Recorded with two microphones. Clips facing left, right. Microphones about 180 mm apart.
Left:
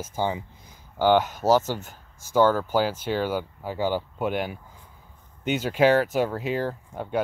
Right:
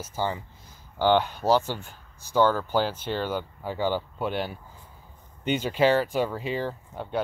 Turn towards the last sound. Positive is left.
turn(degrees=10)  # may be behind; listen again after turning